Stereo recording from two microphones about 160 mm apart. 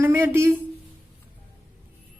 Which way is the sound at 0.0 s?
15° right (ahead or behind).